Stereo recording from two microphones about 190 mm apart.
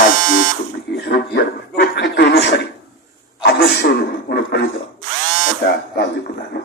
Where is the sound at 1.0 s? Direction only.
60° left (ahead or behind).